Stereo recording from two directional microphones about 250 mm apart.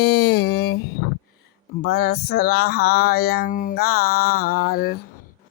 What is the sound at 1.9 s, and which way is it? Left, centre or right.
Mantra, left.